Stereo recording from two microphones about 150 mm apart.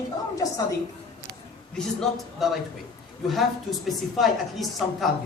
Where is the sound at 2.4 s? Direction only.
Centre (ahead or behind).